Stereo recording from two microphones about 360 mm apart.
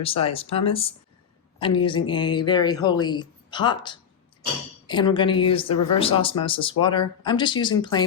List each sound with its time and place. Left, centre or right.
0.0 s speech: centre